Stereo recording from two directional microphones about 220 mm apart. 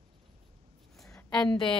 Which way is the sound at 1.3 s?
20° left (ahead or behind).